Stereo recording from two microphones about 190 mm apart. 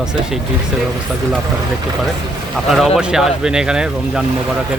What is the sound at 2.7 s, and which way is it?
Speech, centre (ahead or behind).